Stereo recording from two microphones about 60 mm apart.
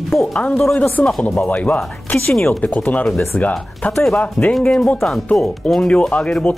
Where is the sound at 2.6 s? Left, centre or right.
Left.